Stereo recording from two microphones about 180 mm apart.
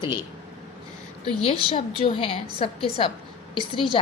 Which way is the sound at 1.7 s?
30° left (ahead or behind).